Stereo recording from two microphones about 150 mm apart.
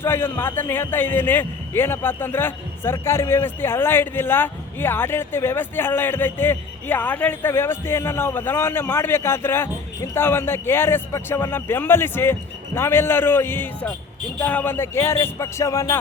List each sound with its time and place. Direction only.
0.0 s a man's voice: 15° left (ahead or behind)